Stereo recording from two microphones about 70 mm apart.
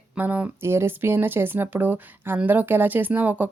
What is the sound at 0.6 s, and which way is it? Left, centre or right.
Speech, right.